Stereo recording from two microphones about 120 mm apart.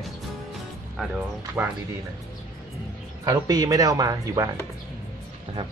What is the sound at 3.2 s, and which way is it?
Speech, 30° right (ahead or behind).